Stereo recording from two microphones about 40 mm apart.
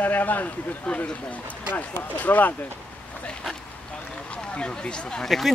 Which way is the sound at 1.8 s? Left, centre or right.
Left.